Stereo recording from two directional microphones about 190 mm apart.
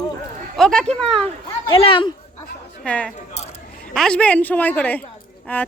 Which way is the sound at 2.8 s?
5° left (ahead or behind).